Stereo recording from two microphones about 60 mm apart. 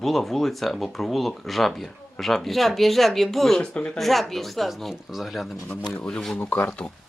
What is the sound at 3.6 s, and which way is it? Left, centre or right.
Speech, centre.